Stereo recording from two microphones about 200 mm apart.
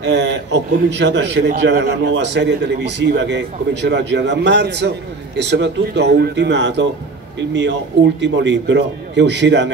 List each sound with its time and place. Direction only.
0.0 s a man's voice: 60° right (ahead or behind)
8.2 s a man's voice: 60° right (ahead or behind)